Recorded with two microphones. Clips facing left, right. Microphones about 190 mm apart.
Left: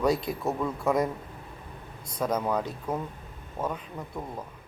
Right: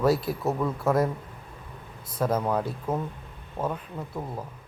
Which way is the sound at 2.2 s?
5° right (ahead or behind).